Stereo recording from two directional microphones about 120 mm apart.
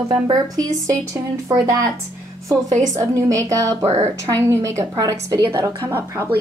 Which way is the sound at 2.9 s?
30° right (ahead or behind).